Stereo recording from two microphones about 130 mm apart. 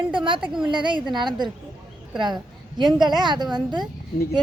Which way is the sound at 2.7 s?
35° right (ahead or behind).